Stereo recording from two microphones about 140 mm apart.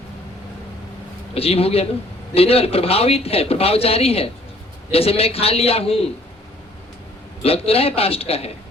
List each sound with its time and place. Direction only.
1.3 s speech: 45° left (ahead or behind)
7.4 s speech: 45° left (ahead or behind)